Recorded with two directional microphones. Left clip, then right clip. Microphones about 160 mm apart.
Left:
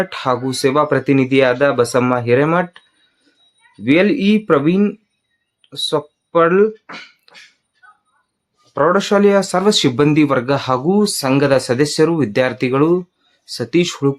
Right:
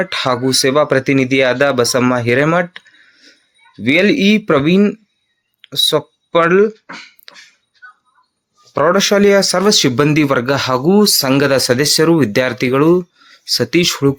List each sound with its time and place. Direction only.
0.0 s speech: 20° right (ahead or behind)
3.8 s speech: 20° right (ahead or behind)
7.3 s music: 20° right (ahead or behind)
8.7 s speech: 15° right (ahead or behind)